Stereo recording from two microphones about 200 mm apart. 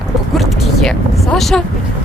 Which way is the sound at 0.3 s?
Centre (ahead or behind).